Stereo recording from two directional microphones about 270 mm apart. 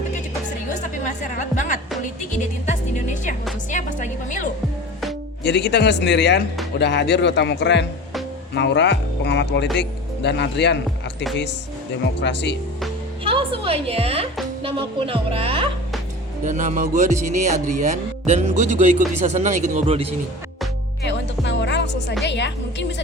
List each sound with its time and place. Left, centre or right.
0.7 s music: left
5.4 s speech: left
12.2 s speech: left
13.2 s a woman's voice: centre
21.0 s music: left
22.2 s speech: left